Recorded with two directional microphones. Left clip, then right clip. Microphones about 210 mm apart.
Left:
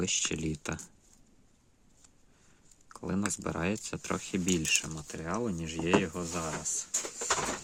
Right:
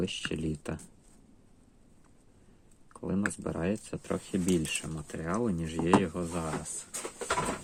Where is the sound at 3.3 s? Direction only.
25° left (ahead or behind).